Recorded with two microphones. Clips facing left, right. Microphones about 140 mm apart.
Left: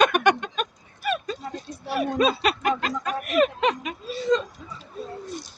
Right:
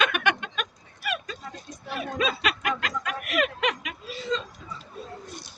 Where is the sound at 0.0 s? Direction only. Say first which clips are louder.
Left 6 dB; 40° left (ahead or behind).